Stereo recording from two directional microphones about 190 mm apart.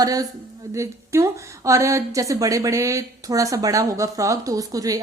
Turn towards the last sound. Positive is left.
turn(degrees=-20)  # may be behind; listen again after turning